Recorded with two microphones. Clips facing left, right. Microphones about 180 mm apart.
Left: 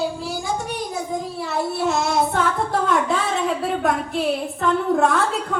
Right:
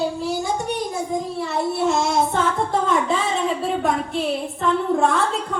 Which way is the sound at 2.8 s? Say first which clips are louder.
Even; centre (ahead or behind).